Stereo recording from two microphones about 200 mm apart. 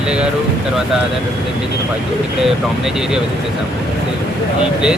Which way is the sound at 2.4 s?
Centre (ahead or behind).